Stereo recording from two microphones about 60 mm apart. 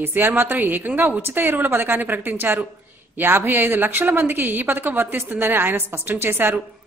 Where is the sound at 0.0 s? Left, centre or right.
Right.